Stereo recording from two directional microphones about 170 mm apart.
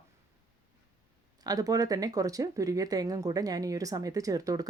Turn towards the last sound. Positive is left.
turn(degrees=-20)  # may be behind; listen again after turning